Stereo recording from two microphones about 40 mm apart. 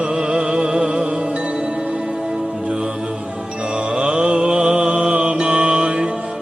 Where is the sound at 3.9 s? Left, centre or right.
Right.